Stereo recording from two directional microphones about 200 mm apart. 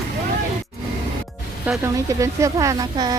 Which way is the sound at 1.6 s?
10° right (ahead or behind).